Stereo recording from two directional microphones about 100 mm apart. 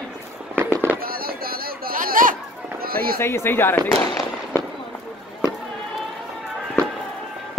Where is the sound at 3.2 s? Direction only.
25° left (ahead or behind).